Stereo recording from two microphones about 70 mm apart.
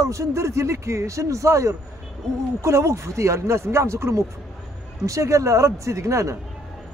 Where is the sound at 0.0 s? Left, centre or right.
Right.